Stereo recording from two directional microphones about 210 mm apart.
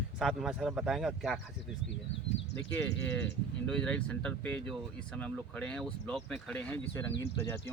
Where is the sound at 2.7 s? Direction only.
5° left (ahead or behind).